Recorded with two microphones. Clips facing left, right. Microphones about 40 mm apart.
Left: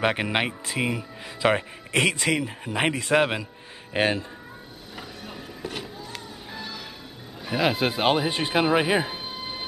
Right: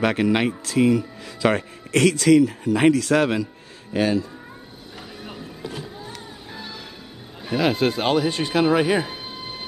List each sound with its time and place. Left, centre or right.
0.0 s speech: left
3.9 s speech: left
6.5 s music: centre
7.4 s speech: centre
8.6 s music: centre